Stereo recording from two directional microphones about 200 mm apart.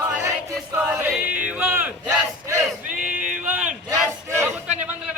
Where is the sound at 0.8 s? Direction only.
10° right (ahead or behind).